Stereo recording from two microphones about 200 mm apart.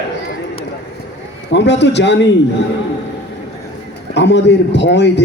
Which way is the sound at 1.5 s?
60° left (ahead or behind).